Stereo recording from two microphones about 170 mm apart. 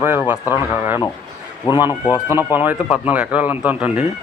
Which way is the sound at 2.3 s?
10° right (ahead or behind).